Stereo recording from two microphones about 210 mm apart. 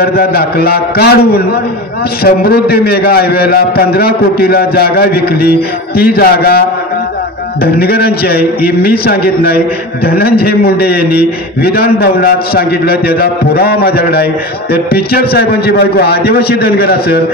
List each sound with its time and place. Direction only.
0.0 s a man's voice: 45° left (ahead or behind)
7.6 s a man's voice: 50° left (ahead or behind)